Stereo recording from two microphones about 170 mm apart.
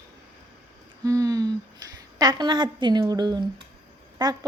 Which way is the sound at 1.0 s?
20° right (ahead or behind).